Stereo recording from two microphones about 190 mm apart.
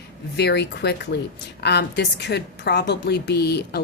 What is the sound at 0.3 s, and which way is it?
A woman's voice, 60° left (ahead or behind).